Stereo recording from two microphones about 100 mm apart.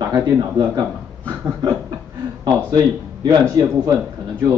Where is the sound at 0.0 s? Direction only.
35° right (ahead or behind).